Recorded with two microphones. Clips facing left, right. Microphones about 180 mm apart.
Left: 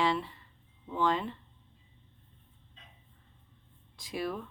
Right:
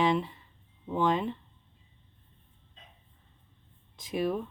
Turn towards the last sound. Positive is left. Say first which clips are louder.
# right 5 dB
turn(degrees=-20)  # may be behind; listen again after turning